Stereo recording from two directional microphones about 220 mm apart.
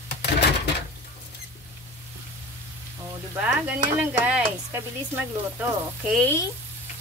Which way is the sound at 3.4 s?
5° right (ahead or behind).